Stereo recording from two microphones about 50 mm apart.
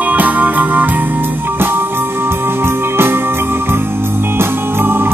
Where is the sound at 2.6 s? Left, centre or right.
Right.